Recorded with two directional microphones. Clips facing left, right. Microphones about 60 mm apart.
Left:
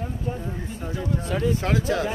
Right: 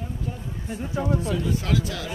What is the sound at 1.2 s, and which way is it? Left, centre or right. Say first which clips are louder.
Speech: left 2 dB; left.